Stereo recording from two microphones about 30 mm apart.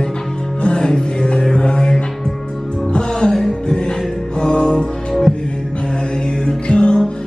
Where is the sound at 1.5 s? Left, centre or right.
Left.